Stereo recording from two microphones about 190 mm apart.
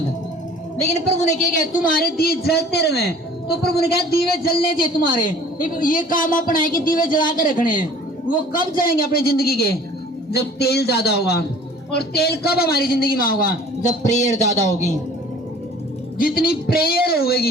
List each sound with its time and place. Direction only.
1.8 s a man's voice: 50° left (ahead or behind)
13.8 s a man's voice: 40° left (ahead or behind)
16.1 s a man's voice: 50° left (ahead or behind)